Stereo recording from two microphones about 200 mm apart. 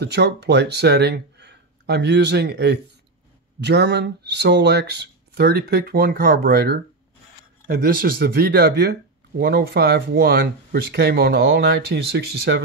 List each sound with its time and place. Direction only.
0.0 s speech: 55° right (ahead or behind)